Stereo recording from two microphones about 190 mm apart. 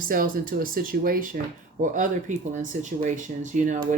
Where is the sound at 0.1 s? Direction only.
45° right (ahead or behind).